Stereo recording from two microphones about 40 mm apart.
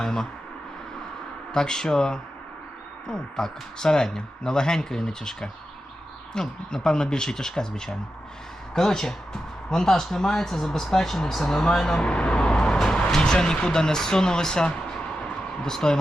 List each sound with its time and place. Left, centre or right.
0.0 s speech: centre
1.5 s speech: centre
11.9 s speech: left